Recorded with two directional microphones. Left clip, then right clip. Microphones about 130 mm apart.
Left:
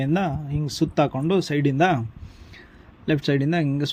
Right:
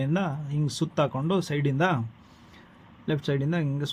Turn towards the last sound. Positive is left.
turn(degrees=35)  # may be behind; listen again after turning